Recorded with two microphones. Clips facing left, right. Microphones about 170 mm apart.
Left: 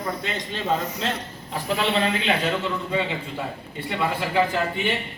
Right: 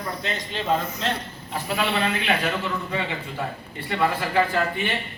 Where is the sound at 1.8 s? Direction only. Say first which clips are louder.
Left 1 dB; 25° left (ahead or behind).